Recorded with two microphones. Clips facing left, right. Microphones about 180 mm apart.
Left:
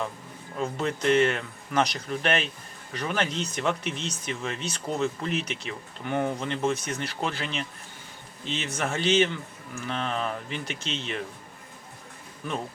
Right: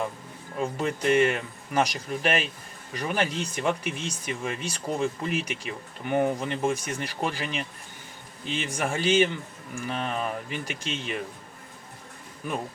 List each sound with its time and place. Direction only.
0.6 s speech: 10° right (ahead or behind)